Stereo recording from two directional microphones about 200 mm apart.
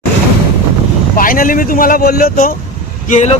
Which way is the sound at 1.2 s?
45° left (ahead or behind).